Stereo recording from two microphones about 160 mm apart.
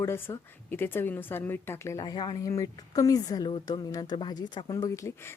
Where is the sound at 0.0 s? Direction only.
15° left (ahead or behind).